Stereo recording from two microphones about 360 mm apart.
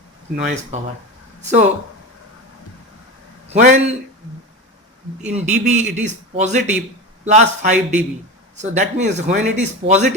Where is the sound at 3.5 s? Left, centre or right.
Centre.